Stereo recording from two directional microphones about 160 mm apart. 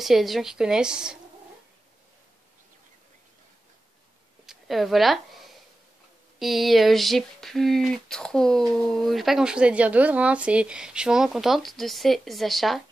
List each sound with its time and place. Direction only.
0.0 s speech: centre (ahead or behind)
4.5 s a woman's voice: centre (ahead or behind)